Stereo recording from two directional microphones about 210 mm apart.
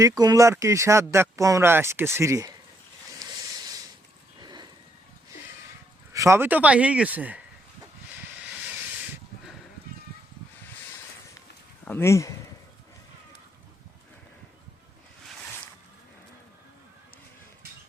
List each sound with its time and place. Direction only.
0.0 s speech: 15° right (ahead or behind)
3.2 s a sound: 15° right (ahead or behind)
6.1 s speech: 15° right (ahead or behind)
11.9 s speech: 10° left (ahead or behind)